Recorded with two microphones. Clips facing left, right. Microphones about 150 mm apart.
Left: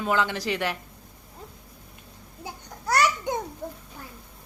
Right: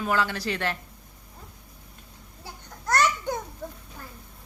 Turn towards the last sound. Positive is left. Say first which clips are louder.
# left 1 dB
turn(degrees=10)  # may be behind; listen again after turning